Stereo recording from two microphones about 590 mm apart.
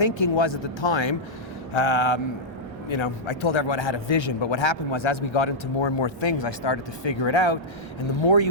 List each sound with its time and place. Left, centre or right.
0.0 s a man's voice: left